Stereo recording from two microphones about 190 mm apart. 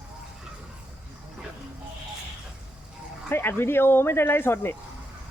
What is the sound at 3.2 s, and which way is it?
Speech, 10° left (ahead or behind).